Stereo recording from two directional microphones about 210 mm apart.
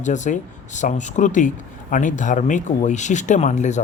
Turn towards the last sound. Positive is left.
turn(degrees=35)  # may be behind; listen again after turning